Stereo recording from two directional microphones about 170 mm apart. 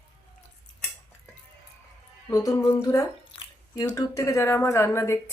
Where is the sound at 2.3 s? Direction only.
20° left (ahead or behind).